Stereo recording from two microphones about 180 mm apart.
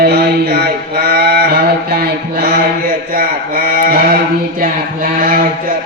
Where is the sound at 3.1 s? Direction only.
50° right (ahead or behind).